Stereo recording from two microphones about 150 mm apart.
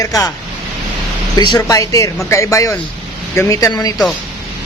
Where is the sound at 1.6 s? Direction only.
20° left (ahead or behind).